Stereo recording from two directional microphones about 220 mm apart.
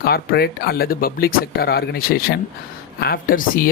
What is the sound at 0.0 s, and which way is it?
Speech, 45° left (ahead or behind).